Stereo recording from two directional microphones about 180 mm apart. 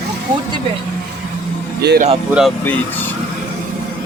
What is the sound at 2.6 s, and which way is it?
Speech, 10° left (ahead or behind).